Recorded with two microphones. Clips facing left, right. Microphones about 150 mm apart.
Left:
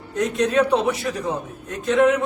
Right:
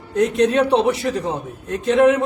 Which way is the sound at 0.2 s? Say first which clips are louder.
Right 3 dB; 30° right (ahead or behind).